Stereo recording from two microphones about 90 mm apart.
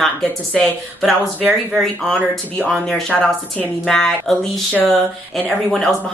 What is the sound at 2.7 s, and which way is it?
Speech, 5° left (ahead or behind).